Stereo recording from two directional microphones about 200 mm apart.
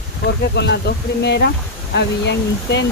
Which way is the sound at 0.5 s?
60° left (ahead or behind).